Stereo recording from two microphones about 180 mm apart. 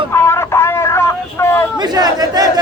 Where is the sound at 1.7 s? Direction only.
20° right (ahead or behind).